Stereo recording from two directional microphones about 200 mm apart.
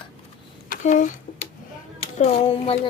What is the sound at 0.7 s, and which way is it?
Speech, 40° left (ahead or behind).